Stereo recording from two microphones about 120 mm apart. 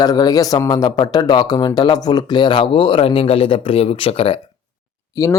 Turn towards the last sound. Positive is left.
turn(degrees=30)  # may be behind; listen again after turning